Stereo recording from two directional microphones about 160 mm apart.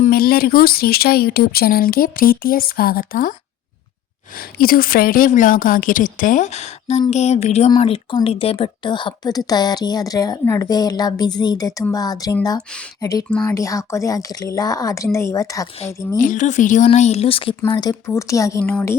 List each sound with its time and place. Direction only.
0.0 s speech: 70° left (ahead or behind)
4.4 s a woman's voice: 65° left (ahead or behind); by 15.6 s 20° left (ahead or behind)
16.1 s speech: 55° left (ahead or behind); by 17.5 s 35° left (ahead or behind)
17.7 s a woman's voice: 25° left (ahead or behind)
18.6 s a woman's voice: 10° left (ahead or behind)